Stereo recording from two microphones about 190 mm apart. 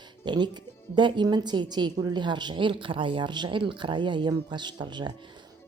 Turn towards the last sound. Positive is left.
turn(degrees=-25)  # may be behind; listen again after turning